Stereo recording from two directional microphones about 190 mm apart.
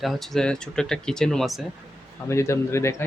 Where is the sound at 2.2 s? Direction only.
15° left (ahead or behind).